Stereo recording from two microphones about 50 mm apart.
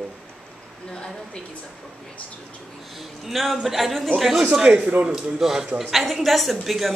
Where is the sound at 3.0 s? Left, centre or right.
Centre.